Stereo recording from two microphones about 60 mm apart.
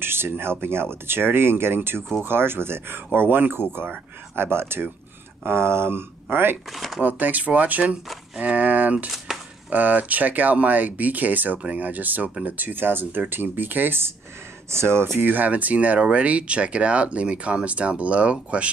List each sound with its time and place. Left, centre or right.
0.0 s speech: right
6.7 s speech: centre
7.0 s speech: right